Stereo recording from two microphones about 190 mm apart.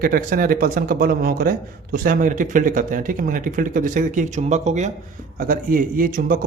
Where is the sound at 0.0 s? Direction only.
50° right (ahead or behind).